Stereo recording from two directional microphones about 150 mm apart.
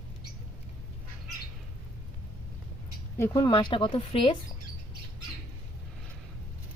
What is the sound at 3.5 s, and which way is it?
Speech, 35° left (ahead or behind).